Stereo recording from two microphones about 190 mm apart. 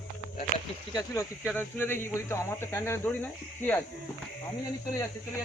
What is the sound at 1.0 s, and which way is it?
Speech, 15° left (ahead or behind).